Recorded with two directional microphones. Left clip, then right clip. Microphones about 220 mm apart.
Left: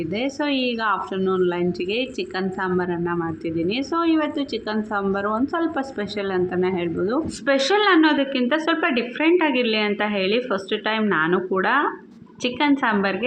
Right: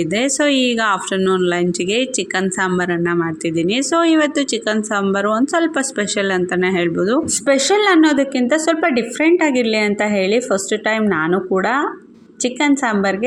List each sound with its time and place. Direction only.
0.0 s a woman's voice: 30° right (ahead or behind)